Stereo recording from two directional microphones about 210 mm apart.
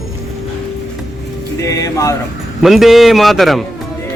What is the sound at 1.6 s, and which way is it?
Speech, 15° left (ahead or behind).